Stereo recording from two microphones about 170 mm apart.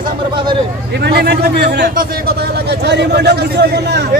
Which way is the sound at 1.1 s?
75° right (ahead or behind).